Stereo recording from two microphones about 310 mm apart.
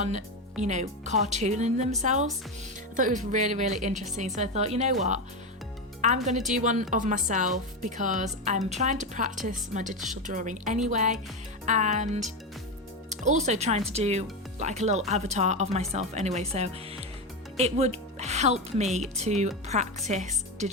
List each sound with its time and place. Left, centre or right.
0.6 s speech: right